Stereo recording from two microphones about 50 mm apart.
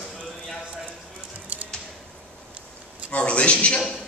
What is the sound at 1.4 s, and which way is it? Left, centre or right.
Music, right.